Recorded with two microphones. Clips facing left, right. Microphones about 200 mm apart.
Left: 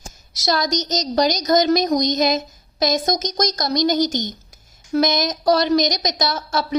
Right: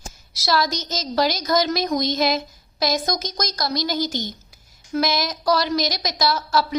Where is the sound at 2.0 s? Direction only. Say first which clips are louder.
Left 3 dB; 20° left (ahead or behind).